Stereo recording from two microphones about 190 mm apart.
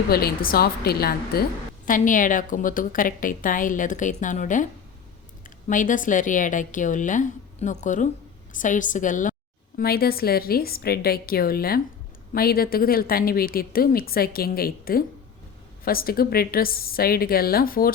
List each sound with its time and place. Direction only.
0.1 s a woman's voice: 55° left (ahead or behind)
9.7 s a woman's voice: 55° left (ahead or behind)